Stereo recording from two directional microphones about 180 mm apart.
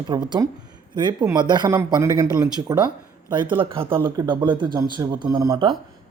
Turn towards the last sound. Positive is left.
turn(degrees=-25)  # may be behind; listen again after turning